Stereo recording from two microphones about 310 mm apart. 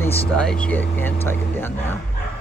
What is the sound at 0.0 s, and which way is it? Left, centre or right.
Speech, centre.